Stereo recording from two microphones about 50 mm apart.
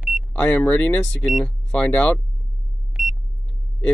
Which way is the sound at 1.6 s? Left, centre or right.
Left.